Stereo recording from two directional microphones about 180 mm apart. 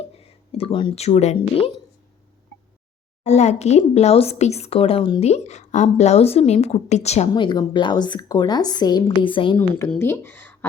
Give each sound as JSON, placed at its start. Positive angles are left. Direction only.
{"t": 0.2, "sound": "speech", "side_deg": 30}
{"t": 3.2, "sound": "a woman's voice", "side_deg": 40}
{"t": 7.3, "sound": "a woman's voice", "side_deg": 25}
{"t": 9.6, "sound": "speech", "side_deg": 15}